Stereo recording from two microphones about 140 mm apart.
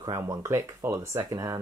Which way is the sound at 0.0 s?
20° right (ahead or behind).